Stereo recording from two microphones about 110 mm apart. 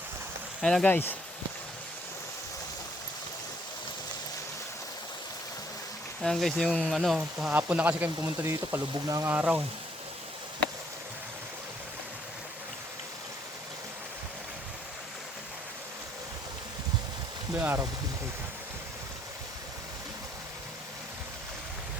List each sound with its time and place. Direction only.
0.6 s speech: 5° left (ahead or behind)
0.9 s speech: 20° left (ahead or behind)
6.2 s speech: 5° left (ahead or behind); by 8.8 s 20° right (ahead or behind)
9.0 s speech: 30° right (ahead or behind)
9.3 s speech: 15° right (ahead or behind)
17.5 s speech: 20° right (ahead or behind)